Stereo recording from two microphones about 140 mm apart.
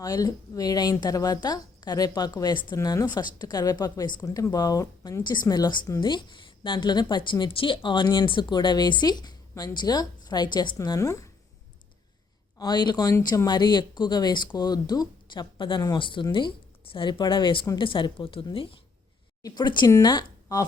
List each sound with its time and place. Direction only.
0.0 s a woman's voice: 25° left (ahead or behind)
12.5 s a woman's voice: 30° left (ahead or behind)
19.4 s a woman's voice: 30° left (ahead or behind)